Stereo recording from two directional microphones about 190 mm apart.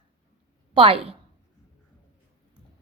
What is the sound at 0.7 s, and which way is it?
Speech, 30° right (ahead or behind).